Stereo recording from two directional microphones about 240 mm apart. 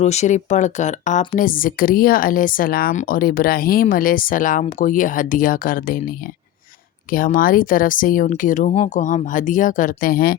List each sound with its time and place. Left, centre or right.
0.0 s a woman's voice: left